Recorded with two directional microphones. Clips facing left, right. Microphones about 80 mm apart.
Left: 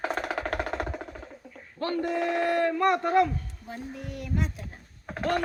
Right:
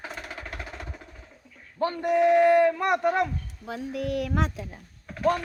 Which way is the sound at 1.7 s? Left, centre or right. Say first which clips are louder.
Right 4 dB; right.